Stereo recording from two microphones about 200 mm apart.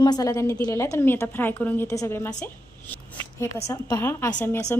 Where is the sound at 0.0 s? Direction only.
20° left (ahead or behind).